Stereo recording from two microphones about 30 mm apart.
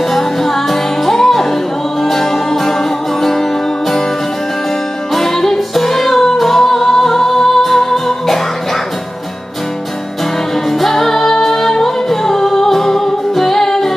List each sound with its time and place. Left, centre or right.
0.1 s music: centre
5.1 s music: centre
10.8 s music: centre